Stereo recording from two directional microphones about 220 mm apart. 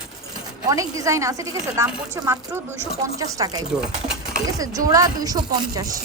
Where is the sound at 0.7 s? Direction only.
15° right (ahead or behind).